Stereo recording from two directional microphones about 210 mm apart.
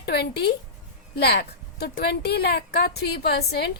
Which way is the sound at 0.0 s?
50° left (ahead or behind).